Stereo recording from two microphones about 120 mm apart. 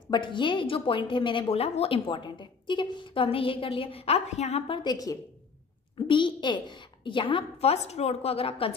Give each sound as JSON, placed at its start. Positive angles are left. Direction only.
{"t": 0.1, "sound": "a woman's voice", "side_deg": 40}
{"t": 4.7, "sound": "a woman's voice", "side_deg": 35}
{"t": 5.9, "sound": "a woman's voice", "side_deg": 40}
{"t": 7.7, "sound": "a woman's voice", "side_deg": 65}